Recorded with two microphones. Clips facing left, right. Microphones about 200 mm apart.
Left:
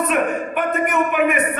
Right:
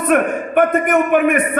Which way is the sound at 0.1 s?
55° right (ahead or behind).